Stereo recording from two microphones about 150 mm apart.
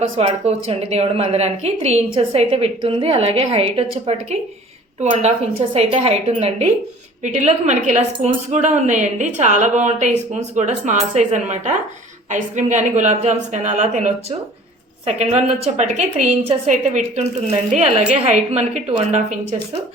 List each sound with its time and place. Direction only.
0.0 s a woman's voice: 45° right (ahead or behind)
5.7 s a woman's voice: 45° right (ahead or behind)